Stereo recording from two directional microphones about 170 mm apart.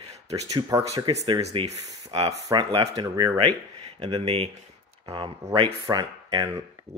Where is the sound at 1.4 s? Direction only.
40° right (ahead or behind).